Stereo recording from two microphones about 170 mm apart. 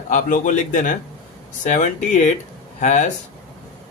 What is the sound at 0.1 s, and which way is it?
Speech, 50° left (ahead or behind).